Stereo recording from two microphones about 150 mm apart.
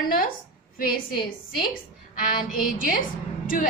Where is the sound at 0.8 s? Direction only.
80° left.